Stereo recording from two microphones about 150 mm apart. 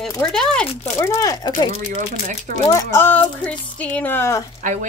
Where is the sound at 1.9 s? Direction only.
60° right (ahead or behind).